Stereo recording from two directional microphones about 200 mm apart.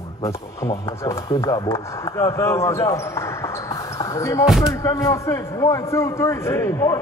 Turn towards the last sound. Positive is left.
turn(degrees=15)  # may be behind; listen again after turning